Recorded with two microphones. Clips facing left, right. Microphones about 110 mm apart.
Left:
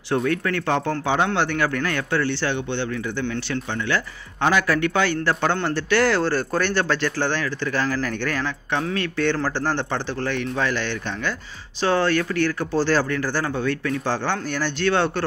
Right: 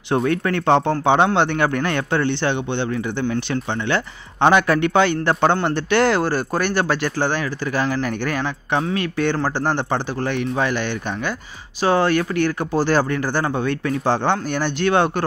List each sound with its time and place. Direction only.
0.1 s a man's voice: 25° right (ahead or behind)